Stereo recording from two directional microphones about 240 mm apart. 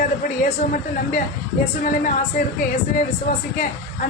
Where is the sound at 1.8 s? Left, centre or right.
Left.